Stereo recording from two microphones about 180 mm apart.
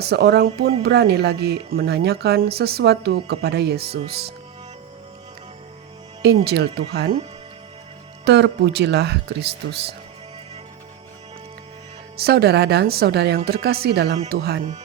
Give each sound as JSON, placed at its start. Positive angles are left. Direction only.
{"t": 0.0, "sound": "speech", "side_deg": -65}
{"t": 6.4, "sound": "speech", "side_deg": -65}
{"t": 8.2, "sound": "speech", "side_deg": -70}
{"t": 12.1, "sound": "speech", "side_deg": -60}